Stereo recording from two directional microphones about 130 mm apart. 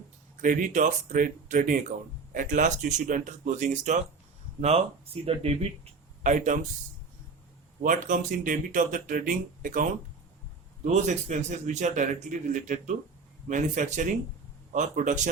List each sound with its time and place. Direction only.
0.4 s a man's voice: 90° right; by 4.0 s 65° right (ahead or behind)
5.2 s speech: 50° right (ahead or behind)
6.3 s a man's voice: 70° right (ahead or behind)
7.8 s speech: 75° right (ahead or behind)
10.9 s a man's voice: 65° right (ahead or behind)